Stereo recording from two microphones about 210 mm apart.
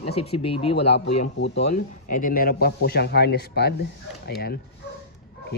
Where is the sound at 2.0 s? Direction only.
40° left (ahead or behind).